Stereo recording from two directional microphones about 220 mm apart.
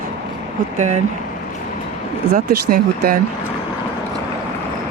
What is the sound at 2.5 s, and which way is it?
Speech, 45° right (ahead or behind).